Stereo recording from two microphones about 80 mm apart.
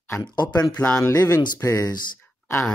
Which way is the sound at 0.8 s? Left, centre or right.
Centre.